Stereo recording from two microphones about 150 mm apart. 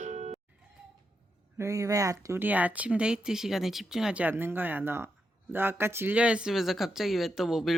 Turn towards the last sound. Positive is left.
turn(degrees=0)  # may be behind; listen again after turning